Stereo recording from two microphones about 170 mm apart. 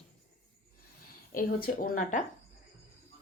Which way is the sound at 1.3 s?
55° left (ahead or behind).